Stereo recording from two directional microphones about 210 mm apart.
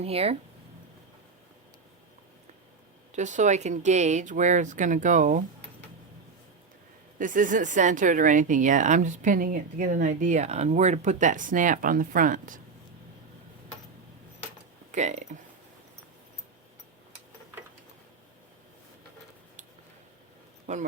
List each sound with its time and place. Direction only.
0.0 s speech: 30° right (ahead or behind)
3.2 s speech: 35° right (ahead or behind)
7.2 s speech: 40° right (ahead or behind)
14.9 s speech: 35° right (ahead or behind)
20.7 s a man's voice: 35° right (ahead or behind)